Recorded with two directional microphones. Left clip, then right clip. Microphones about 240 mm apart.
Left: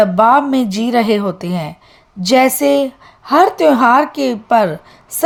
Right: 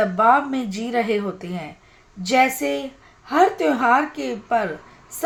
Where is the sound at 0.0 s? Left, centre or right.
Left.